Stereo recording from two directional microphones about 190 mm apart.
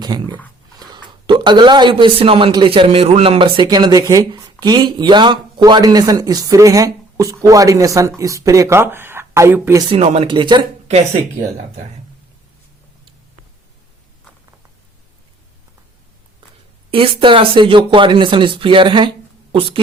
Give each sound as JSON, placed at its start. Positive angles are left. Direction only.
{"t": 0.0, "sound": "speech", "side_deg": -20}
{"t": 9.9, "sound": "speech", "side_deg": -30}
{"t": 16.9, "sound": "speech", "side_deg": -30}